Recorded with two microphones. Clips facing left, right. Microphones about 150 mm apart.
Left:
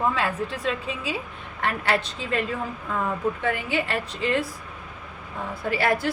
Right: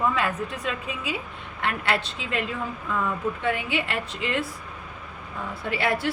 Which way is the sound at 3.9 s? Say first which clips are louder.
Left 3 dB; 35° left (ahead or behind).